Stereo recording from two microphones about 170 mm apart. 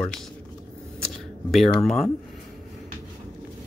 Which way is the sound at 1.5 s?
Centre (ahead or behind).